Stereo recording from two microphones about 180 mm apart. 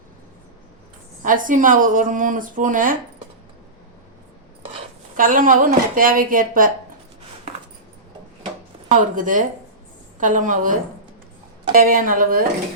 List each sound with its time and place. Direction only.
1.2 s speech: 45° right (ahead or behind)
5.1 s speech: 50° right (ahead or behind)
9.0 s speech: 45° right (ahead or behind)